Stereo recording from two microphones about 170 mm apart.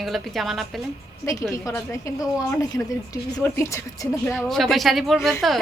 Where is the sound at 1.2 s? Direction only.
20° left (ahead or behind).